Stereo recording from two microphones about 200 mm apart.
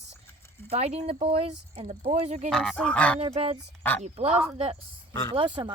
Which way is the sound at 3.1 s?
30° right (ahead or behind).